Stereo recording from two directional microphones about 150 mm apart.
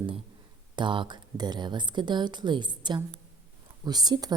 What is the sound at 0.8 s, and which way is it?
A woman's voice, 30° right (ahead or behind).